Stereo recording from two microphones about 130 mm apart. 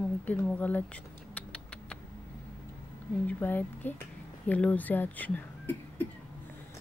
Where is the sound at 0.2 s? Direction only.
10° left (ahead or behind).